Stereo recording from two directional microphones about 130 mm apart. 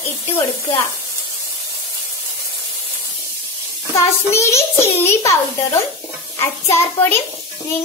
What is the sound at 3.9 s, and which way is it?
A child's voice, 20° left (ahead or behind).